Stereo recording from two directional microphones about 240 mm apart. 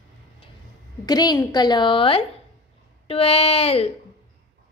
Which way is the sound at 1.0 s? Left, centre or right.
Centre.